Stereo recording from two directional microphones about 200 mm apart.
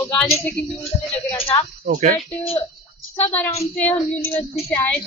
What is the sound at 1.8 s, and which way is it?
Speech, 40° right (ahead or behind).